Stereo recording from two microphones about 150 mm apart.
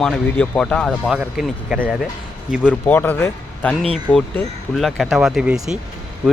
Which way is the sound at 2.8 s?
10° left (ahead or behind).